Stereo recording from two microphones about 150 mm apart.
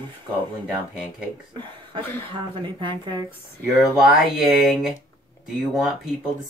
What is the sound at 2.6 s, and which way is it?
Speech, 30° right (ahead or behind).